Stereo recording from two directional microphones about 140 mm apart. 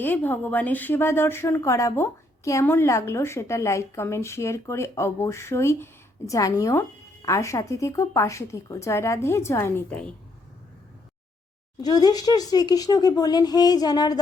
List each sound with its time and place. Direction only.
0.0 s a woman's voice: 15° left (ahead or behind)
11.8 s a woman's voice: 30° left (ahead or behind)